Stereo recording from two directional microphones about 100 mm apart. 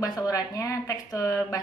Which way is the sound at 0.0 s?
35° left (ahead or behind).